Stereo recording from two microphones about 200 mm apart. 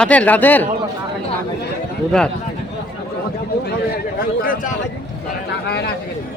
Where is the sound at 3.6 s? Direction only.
50° left (ahead or behind).